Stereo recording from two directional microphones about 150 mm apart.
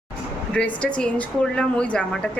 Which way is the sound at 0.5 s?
10° left (ahead or behind).